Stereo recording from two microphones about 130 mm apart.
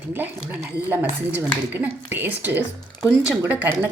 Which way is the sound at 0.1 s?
15° right (ahead or behind).